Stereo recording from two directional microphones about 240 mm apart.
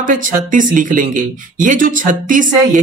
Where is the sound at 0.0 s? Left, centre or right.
Right.